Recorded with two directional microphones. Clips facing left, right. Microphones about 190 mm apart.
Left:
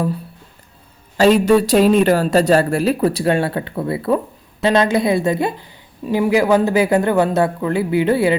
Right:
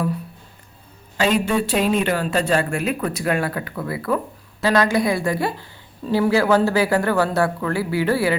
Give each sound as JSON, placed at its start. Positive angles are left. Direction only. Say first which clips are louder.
{"t": 1.1, "sound": "a woman's voice", "louder": "left 7 dB", "side_deg": 40}